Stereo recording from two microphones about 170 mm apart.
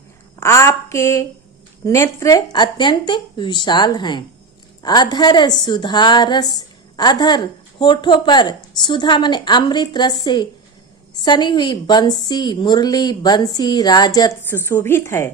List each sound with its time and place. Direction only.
0.3 s a woman's voice: 15° left (ahead or behind)